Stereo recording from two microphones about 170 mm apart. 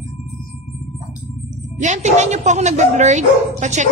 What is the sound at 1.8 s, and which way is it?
Speech, 45° right (ahead or behind).